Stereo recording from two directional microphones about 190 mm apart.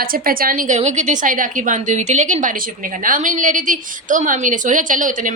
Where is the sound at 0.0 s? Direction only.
50° right (ahead or behind).